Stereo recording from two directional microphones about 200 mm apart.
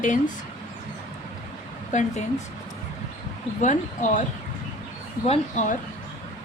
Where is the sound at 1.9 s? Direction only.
40° left (ahead or behind).